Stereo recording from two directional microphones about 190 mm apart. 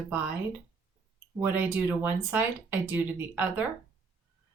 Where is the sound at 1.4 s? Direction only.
10° right (ahead or behind).